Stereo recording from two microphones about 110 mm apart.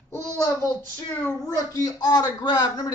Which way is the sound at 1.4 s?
30° left (ahead or behind).